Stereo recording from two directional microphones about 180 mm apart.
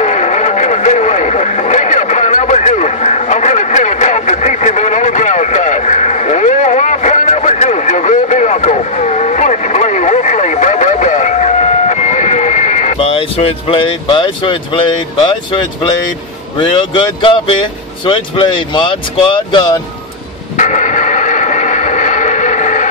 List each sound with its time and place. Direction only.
0.0 s radio: 40° left (ahead or behind); by 15.9 s 25° left (ahead or behind)
16.5 s speech: 30° left (ahead or behind)
20.5 s radio: 45° left (ahead or behind)